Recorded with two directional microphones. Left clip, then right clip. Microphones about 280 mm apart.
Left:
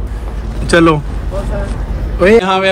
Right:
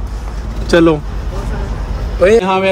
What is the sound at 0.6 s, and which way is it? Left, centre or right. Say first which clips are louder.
Speech: left 1 dB; left.